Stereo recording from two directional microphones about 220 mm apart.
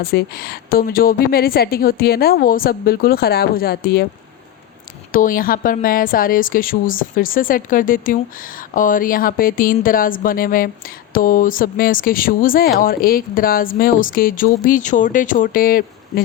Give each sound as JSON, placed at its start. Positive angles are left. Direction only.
{"t": 0.0, "sound": "a woman's voice", "side_deg": 45}
{"t": 5.1, "sound": "speech", "side_deg": 40}